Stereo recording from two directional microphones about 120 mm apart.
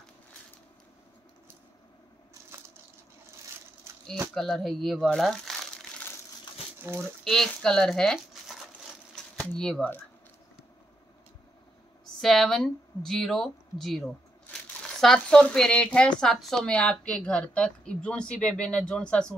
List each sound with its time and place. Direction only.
4.3 s speech: centre (ahead or behind)
6.5 s a sound: 40° left (ahead or behind)
6.8 s speech: 25° right (ahead or behind)
7.2 s speech: 5° left (ahead or behind)
9.1 s typewriter: 5° left (ahead or behind)
12.2 s a woman's voice: centre (ahead or behind)